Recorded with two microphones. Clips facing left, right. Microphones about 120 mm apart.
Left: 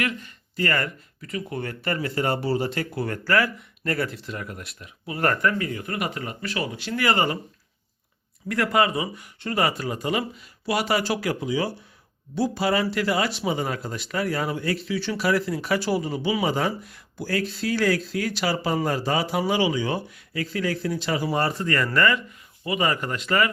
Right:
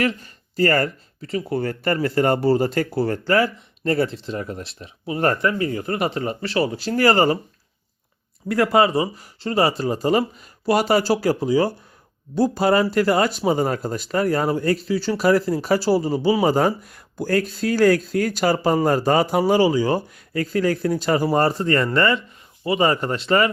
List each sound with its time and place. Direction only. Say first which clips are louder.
0.0 s speech: right 6 dB; 35° right (ahead or behind)
8.4 s speech: right 5 dB; 25° right (ahead or behind)